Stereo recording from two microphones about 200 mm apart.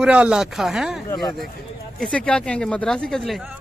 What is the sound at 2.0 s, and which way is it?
Speech, 5° left (ahead or behind).